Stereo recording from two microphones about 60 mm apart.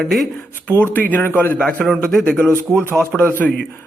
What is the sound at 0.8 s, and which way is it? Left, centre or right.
Speech, left.